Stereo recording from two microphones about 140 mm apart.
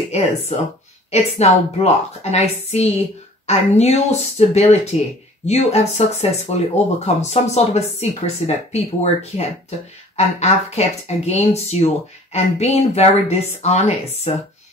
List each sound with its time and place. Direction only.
0.5 s speech: 50° left (ahead or behind)